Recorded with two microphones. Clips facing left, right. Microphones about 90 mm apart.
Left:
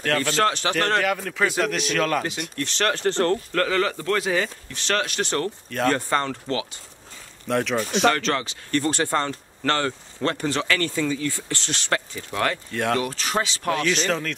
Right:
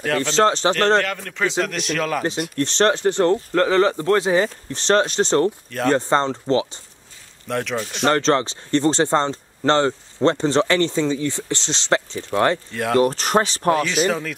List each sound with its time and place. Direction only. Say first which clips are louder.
0.2 s speech: right 5 dB; 25° right (ahead or behind)
0.9 s speech: right 2 dB; 5° left (ahead or behind)
2.5 s speech: right 7 dB; 30° right (ahead or behind)
5.7 s speech: right 2 dB; centre (ahead or behind)
5.9 s speech: right 5 dB; 25° right (ahead or behind)
7.4 s speech: left 1 dB; centre (ahead or behind)
8.1 s speech: right 6 dB; 30° right (ahead or behind)
12.7 s speech: right 1 dB; centre (ahead or behind)
13.0 s speech: right 7 dB; 50° right (ahead or behind)
13.7 s speech: right 3 dB; 5° right (ahead or behind)